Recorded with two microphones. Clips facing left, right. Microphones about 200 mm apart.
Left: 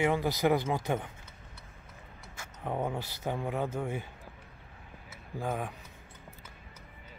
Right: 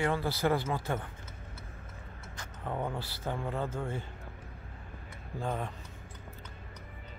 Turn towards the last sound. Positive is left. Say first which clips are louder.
# left 1 dB
turn(degrees=10)  # may be behind; listen again after turning